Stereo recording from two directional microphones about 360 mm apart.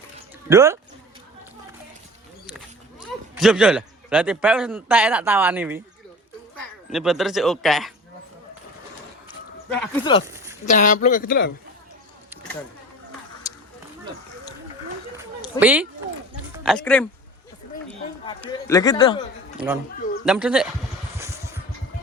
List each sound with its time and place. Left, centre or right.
0.4 s speech: centre
3.0 s a man's voice: centre
9.6 s speech: centre
10.2 s a sound: centre
10.7 s a man's voice: left
15.6 s speech: centre
18.3 s a man's voice: centre
19.5 s speech: centre
21.2 s vehicle: centre